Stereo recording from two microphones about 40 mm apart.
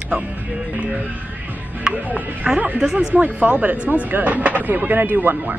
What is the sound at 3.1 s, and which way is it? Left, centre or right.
Speech, right.